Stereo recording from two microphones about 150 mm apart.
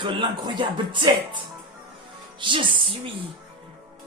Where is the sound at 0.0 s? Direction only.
30° right (ahead or behind).